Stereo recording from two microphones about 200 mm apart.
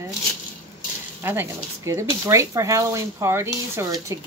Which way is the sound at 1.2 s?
15° right (ahead or behind).